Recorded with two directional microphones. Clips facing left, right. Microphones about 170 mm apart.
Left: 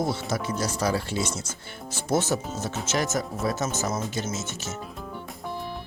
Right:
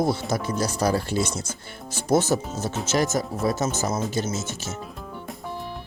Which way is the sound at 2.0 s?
35° right (ahead or behind).